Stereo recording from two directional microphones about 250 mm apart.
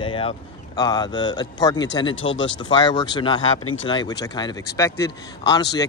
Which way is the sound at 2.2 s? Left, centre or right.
Left.